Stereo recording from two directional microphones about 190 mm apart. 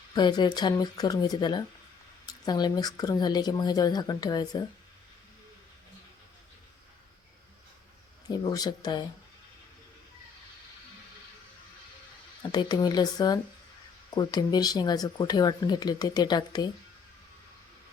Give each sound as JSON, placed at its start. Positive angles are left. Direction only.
{"t": 0.1, "sound": "speech", "side_deg": 20}
{"t": 8.3, "sound": "speech", "side_deg": 20}
{"t": 12.4, "sound": "speech", "side_deg": 20}